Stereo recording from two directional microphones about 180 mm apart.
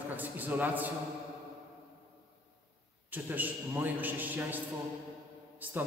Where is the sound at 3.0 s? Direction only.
10° right (ahead or behind).